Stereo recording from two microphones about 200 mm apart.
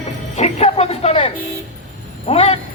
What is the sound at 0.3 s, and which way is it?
Music, 30° left (ahead or behind).